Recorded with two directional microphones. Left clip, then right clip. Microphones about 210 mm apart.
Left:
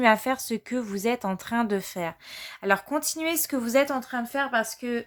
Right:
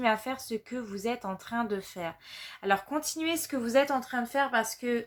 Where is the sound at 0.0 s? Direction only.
45° left (ahead or behind).